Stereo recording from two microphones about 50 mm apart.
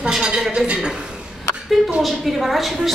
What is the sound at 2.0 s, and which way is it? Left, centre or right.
Speech, centre.